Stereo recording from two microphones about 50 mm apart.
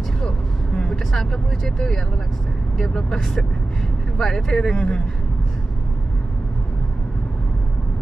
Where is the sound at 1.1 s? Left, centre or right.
Centre.